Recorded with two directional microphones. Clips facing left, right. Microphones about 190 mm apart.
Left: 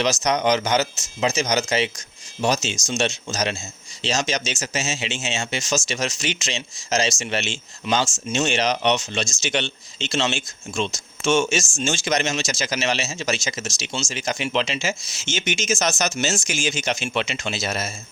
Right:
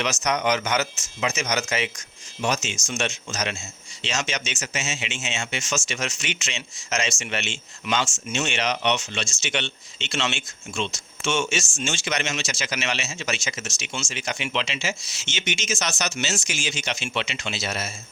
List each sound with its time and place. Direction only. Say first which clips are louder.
0.0 s speech: left 4 dB; 35° left (ahead or behind)